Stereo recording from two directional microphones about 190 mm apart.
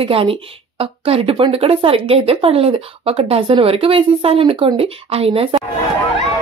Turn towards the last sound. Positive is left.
turn(degrees=-30)  # may be behind; listen again after turning